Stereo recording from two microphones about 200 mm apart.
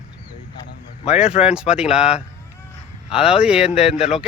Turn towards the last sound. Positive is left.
turn(degrees=-5)  # may be behind; listen again after turning